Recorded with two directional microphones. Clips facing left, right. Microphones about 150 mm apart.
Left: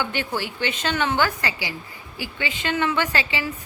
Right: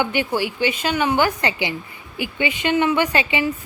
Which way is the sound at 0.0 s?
15° right (ahead or behind).